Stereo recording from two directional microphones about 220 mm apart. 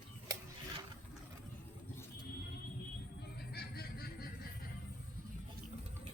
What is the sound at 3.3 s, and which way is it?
Music, 45° left (ahead or behind).